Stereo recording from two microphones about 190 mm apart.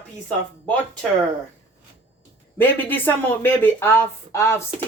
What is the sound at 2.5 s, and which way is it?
Speech, 10° left (ahead or behind).